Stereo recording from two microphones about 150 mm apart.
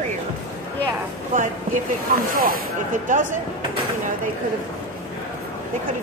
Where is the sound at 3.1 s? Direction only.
60° right (ahead or behind).